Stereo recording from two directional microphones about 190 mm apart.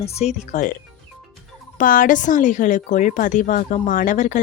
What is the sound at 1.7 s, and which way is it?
Speech, 45° left (ahead or behind).